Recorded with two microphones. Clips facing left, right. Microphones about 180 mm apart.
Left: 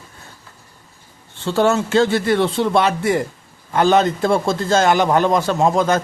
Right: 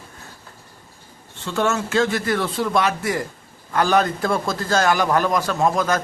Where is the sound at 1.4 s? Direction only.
35° left (ahead or behind).